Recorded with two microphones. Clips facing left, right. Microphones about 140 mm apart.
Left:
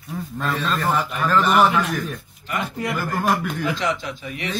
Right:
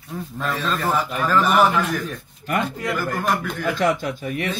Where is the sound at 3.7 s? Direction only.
50° right (ahead or behind).